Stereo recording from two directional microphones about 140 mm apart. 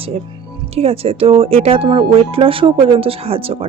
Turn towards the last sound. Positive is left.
turn(degrees=-45)  # may be behind; listen again after turning